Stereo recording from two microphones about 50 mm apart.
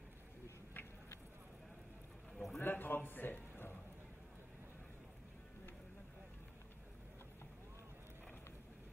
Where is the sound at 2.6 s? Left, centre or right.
Left.